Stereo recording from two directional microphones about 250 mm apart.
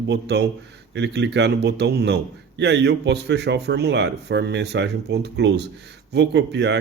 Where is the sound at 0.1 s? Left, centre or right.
Right.